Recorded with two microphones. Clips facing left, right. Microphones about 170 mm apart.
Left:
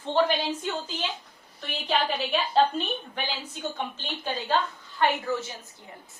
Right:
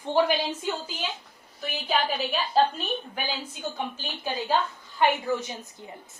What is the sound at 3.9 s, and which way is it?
A woman's voice, 10° right (ahead or behind).